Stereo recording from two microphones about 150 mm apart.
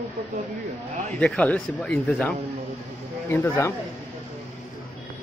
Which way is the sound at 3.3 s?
15° left (ahead or behind).